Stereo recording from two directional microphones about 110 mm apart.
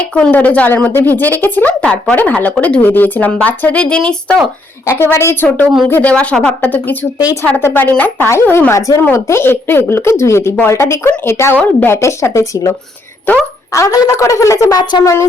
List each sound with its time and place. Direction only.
0.1 s a woman's voice: 10° left (ahead or behind)
4.9 s a woman's voice: 20° left (ahead or behind)
13.7 s a woman's voice: 30° left (ahead or behind)
14.8 s speech: 40° left (ahead or behind)